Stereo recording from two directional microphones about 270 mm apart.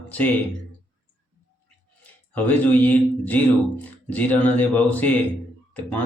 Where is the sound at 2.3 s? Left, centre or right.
Centre.